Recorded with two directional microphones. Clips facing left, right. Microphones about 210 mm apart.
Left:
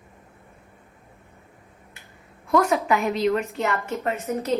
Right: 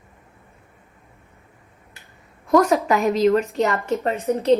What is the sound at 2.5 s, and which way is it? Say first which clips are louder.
A woman's voice: right 4 dB; 40° right (ahead or behind).